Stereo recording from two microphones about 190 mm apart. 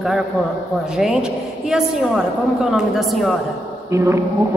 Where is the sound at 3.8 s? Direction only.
15° right (ahead or behind).